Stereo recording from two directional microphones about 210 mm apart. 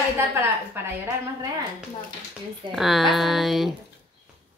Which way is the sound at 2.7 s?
Centre (ahead or behind).